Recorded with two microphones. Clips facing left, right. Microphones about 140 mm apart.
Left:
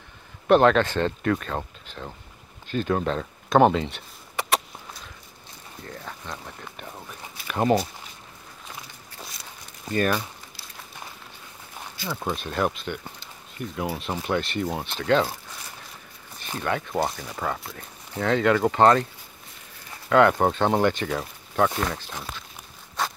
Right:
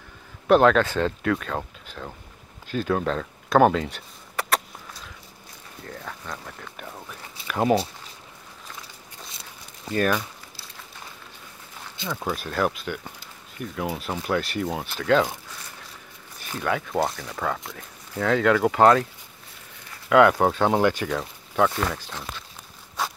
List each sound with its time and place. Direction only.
0.5 s speech: centre (ahead or behind)
3.6 s a sound: 5° right (ahead or behind)
5.9 s speech: centre (ahead or behind)
7.4 s speech: centre (ahead or behind)
9.8 s speech: centre (ahead or behind)
12.2 s speech: 5° right (ahead or behind)
16.6 s speech: centre (ahead or behind)
20.1 s speech: 5° right (ahead or behind)
21.1 s speech: 5° left (ahead or behind)
23.0 s walk: 5° right (ahead or behind)